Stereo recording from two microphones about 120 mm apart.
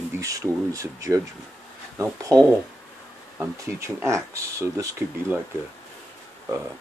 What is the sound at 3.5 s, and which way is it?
Speech, 25° right (ahead or behind).